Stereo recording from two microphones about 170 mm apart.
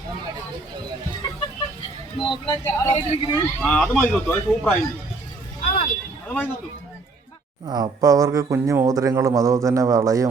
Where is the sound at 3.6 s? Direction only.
10° left (ahead or behind).